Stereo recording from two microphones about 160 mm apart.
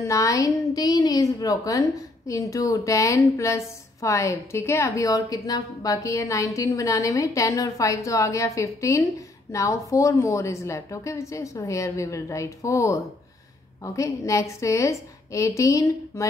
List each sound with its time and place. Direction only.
0.0 s a woman's voice: 20° left (ahead or behind)